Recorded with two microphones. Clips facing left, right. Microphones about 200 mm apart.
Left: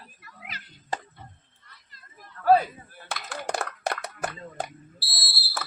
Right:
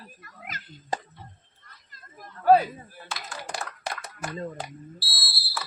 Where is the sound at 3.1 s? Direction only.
65° left (ahead or behind).